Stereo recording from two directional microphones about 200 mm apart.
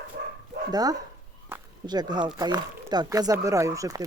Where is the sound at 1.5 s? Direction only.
20° right (ahead or behind).